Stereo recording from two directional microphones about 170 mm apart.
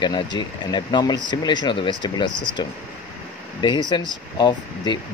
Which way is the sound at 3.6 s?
25° left (ahead or behind).